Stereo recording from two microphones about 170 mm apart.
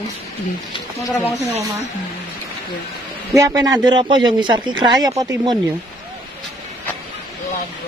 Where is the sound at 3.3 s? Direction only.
20° right (ahead or behind).